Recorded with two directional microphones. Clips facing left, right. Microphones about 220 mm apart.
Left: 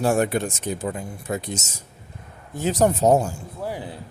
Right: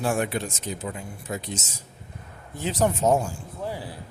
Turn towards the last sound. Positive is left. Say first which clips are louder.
# left 3 dB
turn(degrees=20)  # may be behind; listen again after turning